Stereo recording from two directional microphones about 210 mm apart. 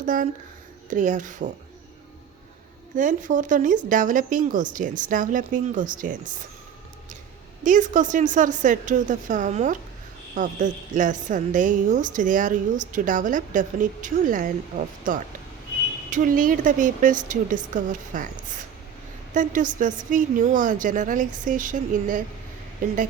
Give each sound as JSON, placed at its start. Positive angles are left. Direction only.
{"t": 0.0, "sound": "a woman's voice", "side_deg": -40}
{"t": 2.9, "sound": "a woman's voice", "side_deg": -40}
{"t": 7.6, "sound": "a woman's voice", "side_deg": -35}